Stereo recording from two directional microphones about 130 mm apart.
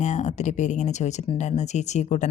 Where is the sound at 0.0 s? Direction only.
65° left (ahead or behind).